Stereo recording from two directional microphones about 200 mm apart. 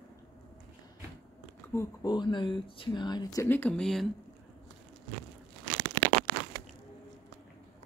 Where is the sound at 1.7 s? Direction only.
15° left (ahead or behind).